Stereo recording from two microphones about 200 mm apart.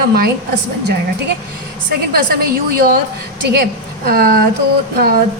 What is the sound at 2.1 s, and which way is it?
Speech, 50° right (ahead or behind).